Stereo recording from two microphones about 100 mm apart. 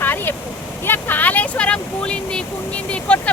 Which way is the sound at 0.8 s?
20° left (ahead or behind).